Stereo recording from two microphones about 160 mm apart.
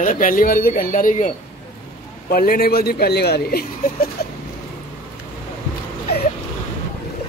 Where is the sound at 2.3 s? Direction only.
70° left (ahead or behind).